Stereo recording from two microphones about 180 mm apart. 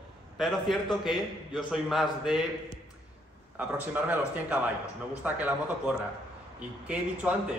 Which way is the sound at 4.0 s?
10° right (ahead or behind).